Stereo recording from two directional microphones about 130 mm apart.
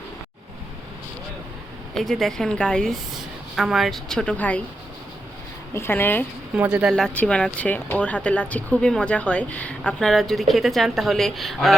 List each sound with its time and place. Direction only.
2.0 s a woman's voice: centre (ahead or behind)
5.7 s speech: 20° left (ahead or behind)
6.5 s speech: 10° right (ahead or behind)
6.9 s speech: 5° left (ahead or behind)